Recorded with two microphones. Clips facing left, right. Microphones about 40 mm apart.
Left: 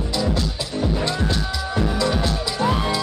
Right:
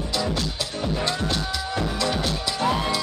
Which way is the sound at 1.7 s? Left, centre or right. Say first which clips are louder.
Left 4 dB; centre.